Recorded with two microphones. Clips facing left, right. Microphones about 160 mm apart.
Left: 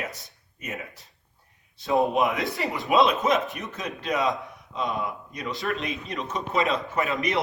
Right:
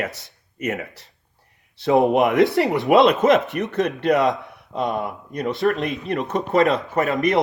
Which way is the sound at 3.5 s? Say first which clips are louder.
Right 12 dB; 70° right (ahead or behind).